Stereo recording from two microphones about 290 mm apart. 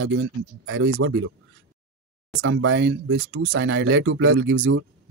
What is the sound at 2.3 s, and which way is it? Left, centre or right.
Speech, right.